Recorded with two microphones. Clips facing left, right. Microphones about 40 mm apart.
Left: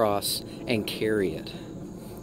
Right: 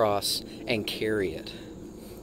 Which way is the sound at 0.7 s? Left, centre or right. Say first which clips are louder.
Left 2 dB; centre.